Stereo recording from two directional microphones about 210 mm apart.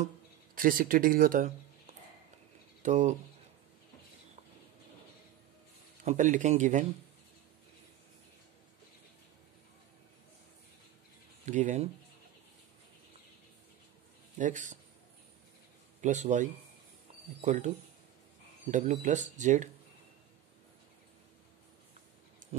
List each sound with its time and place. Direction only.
0.6 s speech: 40° right (ahead or behind)
6.0 s speech: 35° right (ahead or behind)
11.4 s speech: 35° right (ahead or behind)
14.4 s speech: 35° right (ahead or behind)
16.0 s speech: 35° right (ahead or behind)
22.4 s a sound: 35° right (ahead or behind)